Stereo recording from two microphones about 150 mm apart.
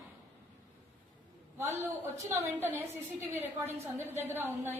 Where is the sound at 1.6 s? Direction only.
15° right (ahead or behind).